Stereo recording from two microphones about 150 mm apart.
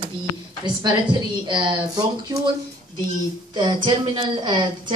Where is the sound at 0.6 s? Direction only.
30° right (ahead or behind).